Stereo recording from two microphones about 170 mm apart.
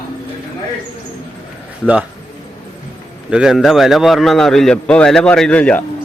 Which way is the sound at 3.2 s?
5° right (ahead or behind).